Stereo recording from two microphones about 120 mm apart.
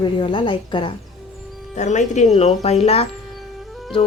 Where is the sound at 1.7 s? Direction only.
85° left.